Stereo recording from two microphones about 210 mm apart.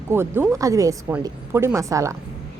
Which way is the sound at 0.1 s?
10° right (ahead or behind).